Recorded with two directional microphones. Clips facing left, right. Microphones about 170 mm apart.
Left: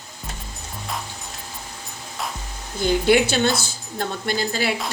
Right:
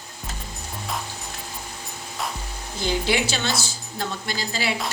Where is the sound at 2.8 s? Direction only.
50° left (ahead or behind).